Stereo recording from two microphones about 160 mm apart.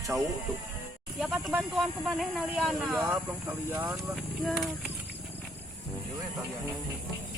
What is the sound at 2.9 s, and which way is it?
Speech, 10° right (ahead or behind).